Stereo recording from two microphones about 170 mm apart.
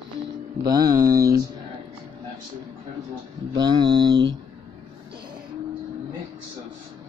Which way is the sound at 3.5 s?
25° right (ahead or behind).